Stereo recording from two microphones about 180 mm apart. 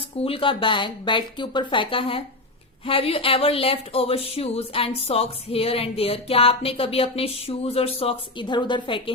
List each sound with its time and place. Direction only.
0.3 s speech: 30° left (ahead or behind)
2.8 s music: 30° left (ahead or behind)